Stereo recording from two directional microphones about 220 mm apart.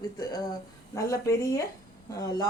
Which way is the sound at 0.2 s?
15° left (ahead or behind).